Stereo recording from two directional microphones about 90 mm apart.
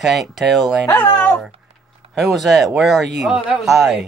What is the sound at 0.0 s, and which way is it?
Speech, centre (ahead or behind).